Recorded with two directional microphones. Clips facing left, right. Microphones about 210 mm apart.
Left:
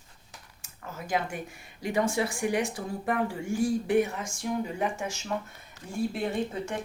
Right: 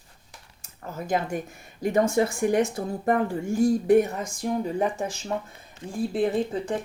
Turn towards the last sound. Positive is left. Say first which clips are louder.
# right 5 dB
turn(degrees=-35)  # may be behind; listen again after turning